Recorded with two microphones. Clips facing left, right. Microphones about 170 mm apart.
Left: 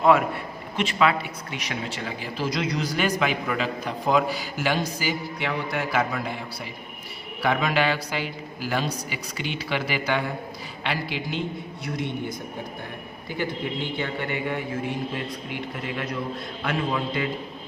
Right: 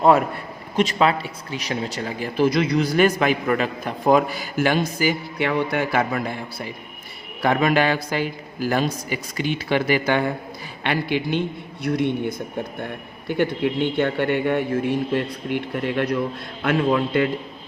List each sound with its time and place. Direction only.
0.0 s a man's voice: 40° right (ahead or behind); by 17.2 s 60° right (ahead or behind)